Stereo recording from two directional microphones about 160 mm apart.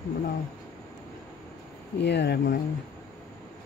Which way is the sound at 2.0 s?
90° left.